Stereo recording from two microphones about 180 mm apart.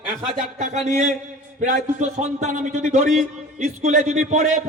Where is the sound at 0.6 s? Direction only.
40° right (ahead or behind).